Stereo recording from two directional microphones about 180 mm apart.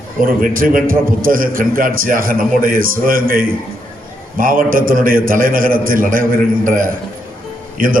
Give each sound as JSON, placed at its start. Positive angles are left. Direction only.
{"t": 0.4, "sound": "a man's voice", "side_deg": -50}